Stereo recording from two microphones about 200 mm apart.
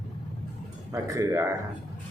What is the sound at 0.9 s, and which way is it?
Speech, 15° right (ahead or behind).